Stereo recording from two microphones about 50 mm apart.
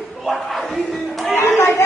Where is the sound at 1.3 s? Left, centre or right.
Left.